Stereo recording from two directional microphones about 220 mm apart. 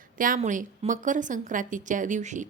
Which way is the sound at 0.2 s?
35° right (ahead or behind).